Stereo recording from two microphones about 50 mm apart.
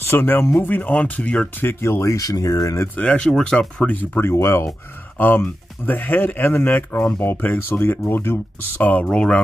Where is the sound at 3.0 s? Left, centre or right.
Left.